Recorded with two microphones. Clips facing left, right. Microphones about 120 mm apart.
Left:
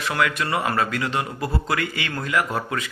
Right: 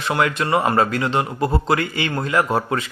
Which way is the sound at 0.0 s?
30° right (ahead or behind).